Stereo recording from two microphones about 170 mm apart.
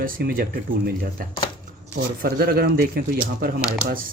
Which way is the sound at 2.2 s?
60° right (ahead or behind).